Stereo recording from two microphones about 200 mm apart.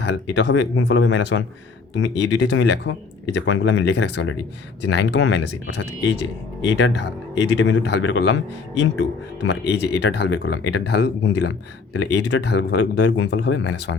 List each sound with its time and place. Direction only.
0.0 s speech: 60° left (ahead or behind)